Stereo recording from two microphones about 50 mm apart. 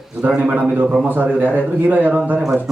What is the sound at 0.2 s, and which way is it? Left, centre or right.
A man's voice, right.